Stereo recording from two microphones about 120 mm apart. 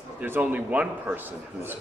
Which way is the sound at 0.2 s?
15° right (ahead or behind).